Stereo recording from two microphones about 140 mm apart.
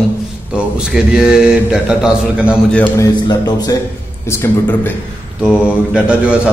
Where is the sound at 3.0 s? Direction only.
30° left (ahead or behind).